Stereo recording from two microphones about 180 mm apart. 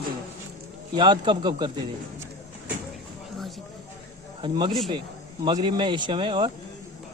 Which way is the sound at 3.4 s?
Centre (ahead or behind).